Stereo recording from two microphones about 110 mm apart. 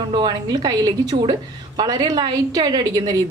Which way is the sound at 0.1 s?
45° right (ahead or behind).